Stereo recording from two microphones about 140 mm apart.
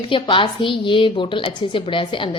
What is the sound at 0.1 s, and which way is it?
A woman's voice, 35° left (ahead or behind).